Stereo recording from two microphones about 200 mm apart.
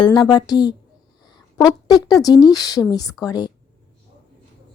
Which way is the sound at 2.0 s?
20° left (ahead or behind).